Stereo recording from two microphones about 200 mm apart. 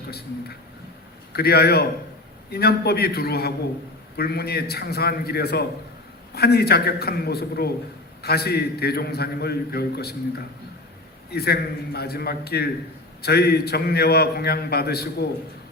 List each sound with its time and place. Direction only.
1.3 s a man's voice: 50° left (ahead or behind)